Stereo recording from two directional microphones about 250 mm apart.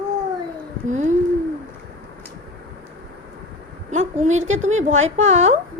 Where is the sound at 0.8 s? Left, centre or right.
Right.